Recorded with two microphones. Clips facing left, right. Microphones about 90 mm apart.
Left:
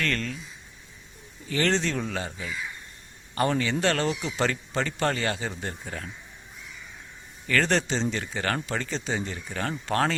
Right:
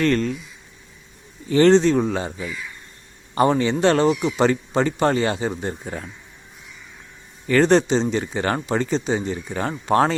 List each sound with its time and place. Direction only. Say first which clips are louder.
0.0 s speech: right 10 dB; 25° right (ahead or behind)
1.5 s speech: right 11 dB; 25° right (ahead or behind)
7.4 s speech: right 9 dB; 20° right (ahead or behind)